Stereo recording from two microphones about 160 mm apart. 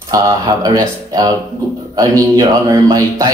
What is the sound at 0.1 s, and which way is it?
Speech, 20° right (ahead or behind).